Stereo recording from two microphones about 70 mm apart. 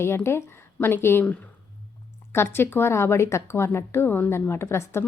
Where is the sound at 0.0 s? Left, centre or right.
Left.